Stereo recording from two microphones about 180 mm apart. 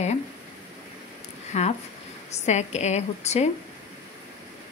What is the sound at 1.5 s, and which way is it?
A woman's voice, 40° left (ahead or behind).